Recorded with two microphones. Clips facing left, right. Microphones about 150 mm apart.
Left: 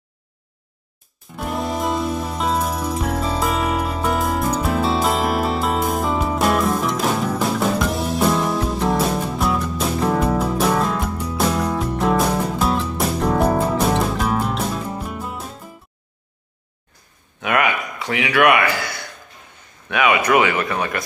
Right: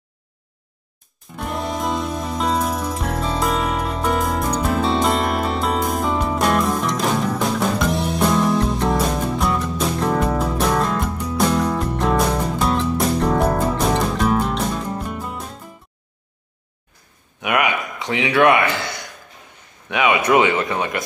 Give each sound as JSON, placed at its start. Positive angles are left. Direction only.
{"t": 1.3, "sound": "music", "side_deg": 0}
{"t": 17.4, "sound": "speech", "side_deg": -15}